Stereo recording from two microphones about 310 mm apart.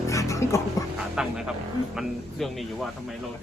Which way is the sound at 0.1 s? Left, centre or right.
Centre.